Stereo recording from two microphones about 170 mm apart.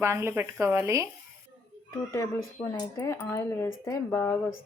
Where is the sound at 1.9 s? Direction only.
15° left (ahead or behind).